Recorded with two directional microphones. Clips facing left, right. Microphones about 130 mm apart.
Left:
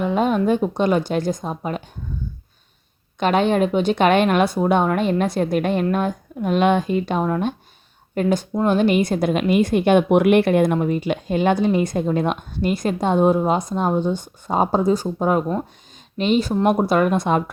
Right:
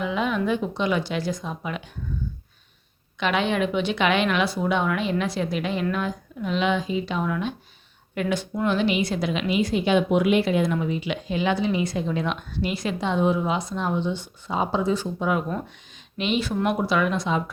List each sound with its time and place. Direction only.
0.0 s a woman's voice: 45° left (ahead or behind)
3.2 s a woman's voice: 45° left (ahead or behind)